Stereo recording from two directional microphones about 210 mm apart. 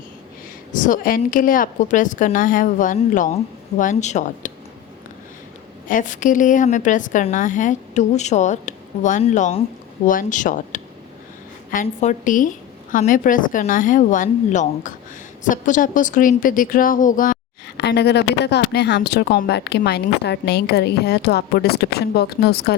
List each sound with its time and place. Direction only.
0.7 s a woman's voice: 40° left (ahead or behind)
5.9 s a woman's voice: 40° left (ahead or behind)
17.7 s speech: 55° left (ahead or behind)